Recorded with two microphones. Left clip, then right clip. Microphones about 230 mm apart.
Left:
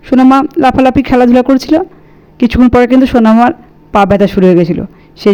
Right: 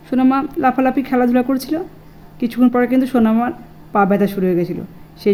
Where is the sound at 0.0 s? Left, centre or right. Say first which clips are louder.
Left 9 dB; left.